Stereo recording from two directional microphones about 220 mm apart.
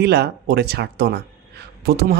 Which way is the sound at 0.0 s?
45° right (ahead or behind).